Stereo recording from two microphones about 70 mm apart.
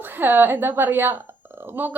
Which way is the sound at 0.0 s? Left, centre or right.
Right.